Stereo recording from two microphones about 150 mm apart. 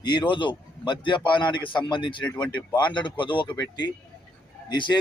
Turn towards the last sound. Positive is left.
turn(degrees=30)  # may be behind; listen again after turning